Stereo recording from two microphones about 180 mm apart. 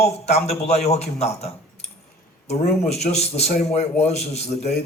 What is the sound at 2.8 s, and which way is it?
Speech, 35° left (ahead or behind).